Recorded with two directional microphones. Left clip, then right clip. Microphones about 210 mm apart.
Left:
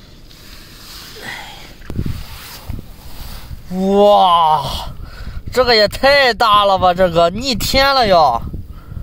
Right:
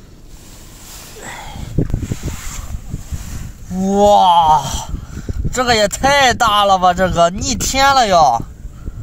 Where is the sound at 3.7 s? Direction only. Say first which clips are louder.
Left 1 dB; 45° left (ahead or behind).